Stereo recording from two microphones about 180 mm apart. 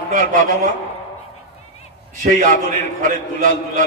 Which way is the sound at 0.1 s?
50° right (ahead or behind).